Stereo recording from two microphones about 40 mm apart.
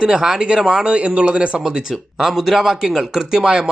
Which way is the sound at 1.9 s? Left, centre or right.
Centre.